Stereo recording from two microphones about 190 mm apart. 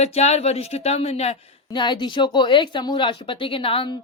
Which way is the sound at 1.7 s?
25° left (ahead or behind).